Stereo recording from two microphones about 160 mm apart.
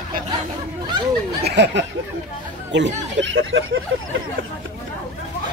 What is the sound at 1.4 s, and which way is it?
Speech, 90° right.